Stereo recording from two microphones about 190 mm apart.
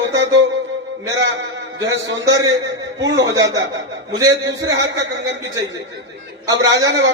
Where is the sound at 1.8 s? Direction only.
70° right (ahead or behind).